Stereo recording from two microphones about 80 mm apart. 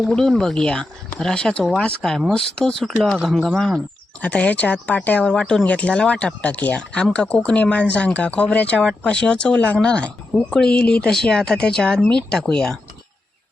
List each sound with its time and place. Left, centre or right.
0.1 s speech: centre
4.2 s speech: centre